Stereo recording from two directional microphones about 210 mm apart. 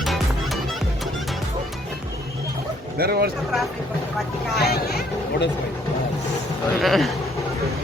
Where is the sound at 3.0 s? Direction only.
50° right (ahead or behind).